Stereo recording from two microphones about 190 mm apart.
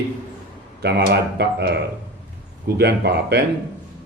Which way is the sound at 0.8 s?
55° right (ahead or behind).